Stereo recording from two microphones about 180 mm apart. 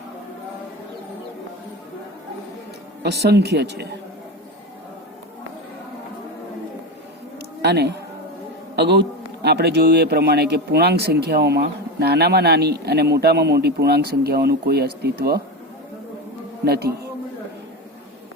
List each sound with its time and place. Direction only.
3.0 s a man's voice: 65° right (ahead or behind)
7.3 s a sound: 65° right (ahead or behind)
8.7 s a man's voice: 70° right (ahead or behind)
16.6 s a man's voice: 60° right (ahead or behind)